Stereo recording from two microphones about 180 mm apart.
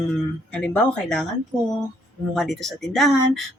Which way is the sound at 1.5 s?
20° right (ahead or behind).